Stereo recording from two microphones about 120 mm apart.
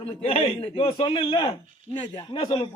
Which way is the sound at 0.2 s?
55° left (ahead or behind).